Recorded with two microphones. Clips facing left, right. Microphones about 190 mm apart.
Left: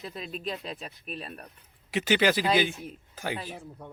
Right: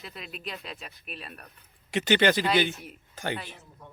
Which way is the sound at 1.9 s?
5° left (ahead or behind).